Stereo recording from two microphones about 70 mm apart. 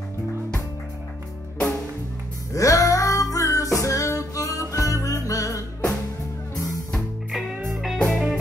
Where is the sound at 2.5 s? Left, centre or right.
Left.